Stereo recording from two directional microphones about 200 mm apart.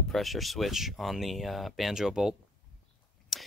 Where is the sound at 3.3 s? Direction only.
Centre (ahead or behind).